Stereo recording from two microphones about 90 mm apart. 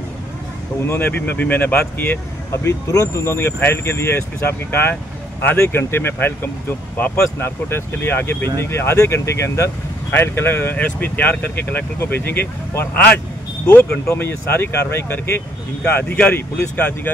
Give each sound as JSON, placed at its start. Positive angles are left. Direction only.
{"t": 0.8, "sound": "speech", "side_deg": 20}